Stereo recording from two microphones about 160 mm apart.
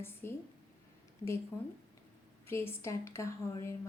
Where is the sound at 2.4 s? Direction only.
15° left (ahead or behind).